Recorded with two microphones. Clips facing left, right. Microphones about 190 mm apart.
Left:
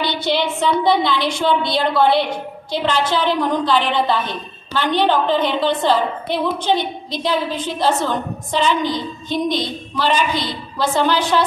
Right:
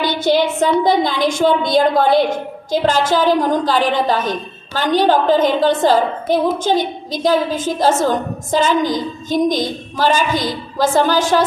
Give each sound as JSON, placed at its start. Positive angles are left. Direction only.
{"t": 0.0, "sound": "a woman's voice", "side_deg": -45}